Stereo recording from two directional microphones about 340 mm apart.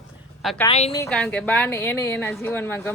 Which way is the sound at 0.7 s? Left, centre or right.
Centre.